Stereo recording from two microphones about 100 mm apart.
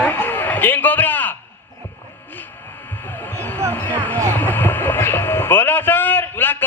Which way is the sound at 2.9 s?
20° left (ahead or behind).